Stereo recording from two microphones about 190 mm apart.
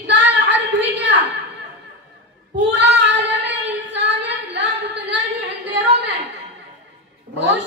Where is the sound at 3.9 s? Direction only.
65° right (ahead or behind).